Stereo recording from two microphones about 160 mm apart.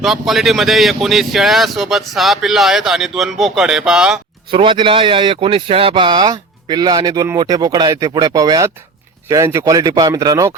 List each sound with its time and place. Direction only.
0.0 s speech: centre (ahead or behind)
4.5 s speech: 30° right (ahead or behind)